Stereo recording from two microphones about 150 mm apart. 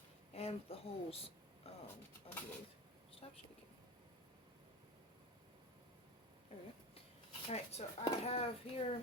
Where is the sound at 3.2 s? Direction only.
45° left (ahead or behind).